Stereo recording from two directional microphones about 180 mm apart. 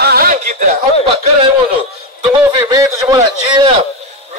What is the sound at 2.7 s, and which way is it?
Speech, 20° right (ahead or behind).